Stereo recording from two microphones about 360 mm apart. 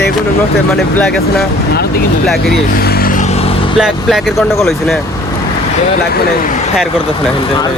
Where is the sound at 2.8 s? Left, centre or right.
Left.